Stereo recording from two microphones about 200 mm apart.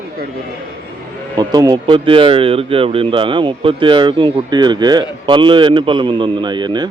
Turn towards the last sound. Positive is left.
turn(degrees=-20)  # may be behind; listen again after turning